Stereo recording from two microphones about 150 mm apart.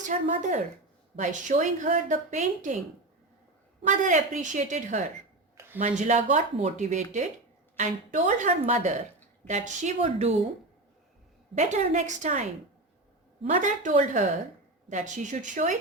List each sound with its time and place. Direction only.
0.0 s a woman's voice: 55° right (ahead or behind)
3.8 s a woman's voice: 55° right (ahead or behind)
11.5 s a woman's voice: 50° right (ahead or behind)